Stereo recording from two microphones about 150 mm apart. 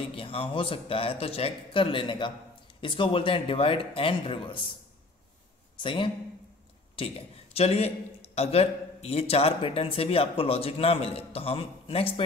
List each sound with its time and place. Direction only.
0.1 s speech: 40° left (ahead or behind)
5.8 s speech: 35° left (ahead or behind)